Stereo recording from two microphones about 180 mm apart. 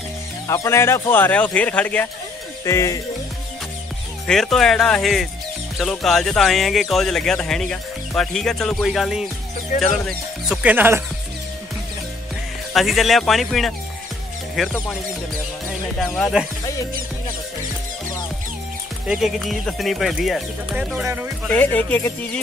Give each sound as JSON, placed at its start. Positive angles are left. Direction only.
{"t": 0.5, "sound": "speech", "side_deg": 15}
{"t": 4.3, "sound": "speech", "side_deg": 0}
{"t": 12.7, "sound": "speech", "side_deg": 0}
{"t": 16.2, "sound": "speech", "side_deg": 0}
{"t": 19.0, "sound": "speech", "side_deg": 0}
{"t": 21.5, "sound": "speech", "side_deg": 10}